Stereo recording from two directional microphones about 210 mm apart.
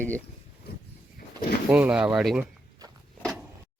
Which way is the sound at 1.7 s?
5° right (ahead or behind).